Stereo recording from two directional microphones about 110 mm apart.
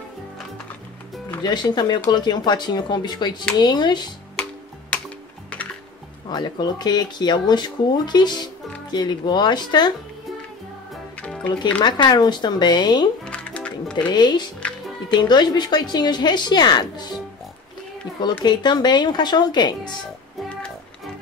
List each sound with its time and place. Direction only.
1.4 s speech: 40° left (ahead or behind)
6.2 s speech: 40° left (ahead or behind)
11.1 s music: 10° left (ahead or behind)
11.8 s speech: 45° left (ahead or behind)
13.2 s music: 10° left (ahead or behind)
14.1 s speech: 40° left (ahead or behind)
18.4 s speech: 40° left (ahead or behind)